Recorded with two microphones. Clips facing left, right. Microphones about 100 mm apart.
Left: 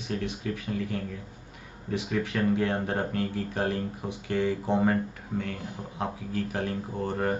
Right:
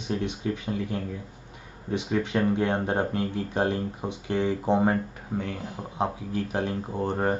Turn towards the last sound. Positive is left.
turn(degrees=-20)  # may be behind; listen again after turning